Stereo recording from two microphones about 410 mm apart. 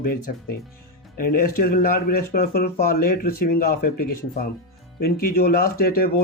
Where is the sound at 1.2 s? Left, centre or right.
Left.